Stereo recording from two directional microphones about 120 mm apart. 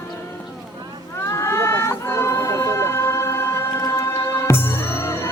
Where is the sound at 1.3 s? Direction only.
25° left (ahead or behind).